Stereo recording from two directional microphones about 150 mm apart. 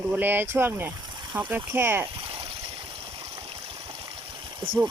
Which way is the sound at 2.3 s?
35° right (ahead or behind).